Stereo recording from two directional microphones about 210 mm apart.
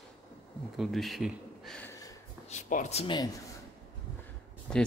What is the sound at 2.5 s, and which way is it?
Speech, 35° left (ahead or behind).